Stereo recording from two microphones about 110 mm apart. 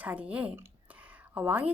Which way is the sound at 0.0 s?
15° right (ahead or behind).